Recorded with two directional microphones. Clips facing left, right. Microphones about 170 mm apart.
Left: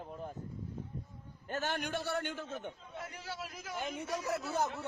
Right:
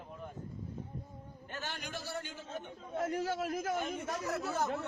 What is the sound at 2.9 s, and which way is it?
A man's voice, 45° right (ahead or behind).